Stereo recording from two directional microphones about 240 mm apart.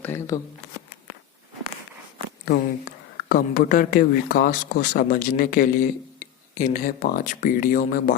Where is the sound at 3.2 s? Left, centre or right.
Left.